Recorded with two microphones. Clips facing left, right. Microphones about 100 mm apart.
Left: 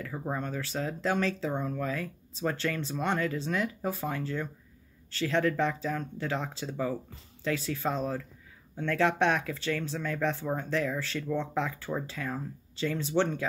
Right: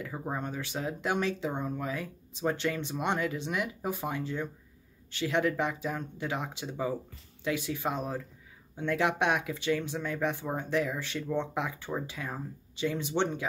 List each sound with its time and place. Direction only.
0.0 s speech: 15° right (ahead or behind)